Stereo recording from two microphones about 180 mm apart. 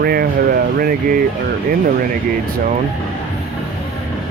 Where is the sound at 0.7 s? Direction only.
55° right (ahead or behind).